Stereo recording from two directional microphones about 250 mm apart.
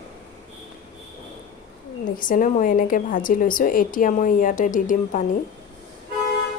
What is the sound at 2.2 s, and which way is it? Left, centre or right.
Speech, left.